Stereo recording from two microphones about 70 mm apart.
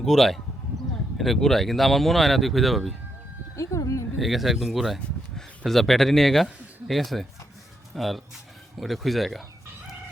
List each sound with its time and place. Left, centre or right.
0.0 s speech: centre
3.5 s speech: left
4.2 s speech: centre